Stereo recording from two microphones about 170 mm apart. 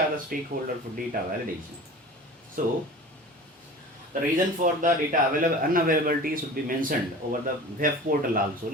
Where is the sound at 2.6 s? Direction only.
55° right (ahead or behind).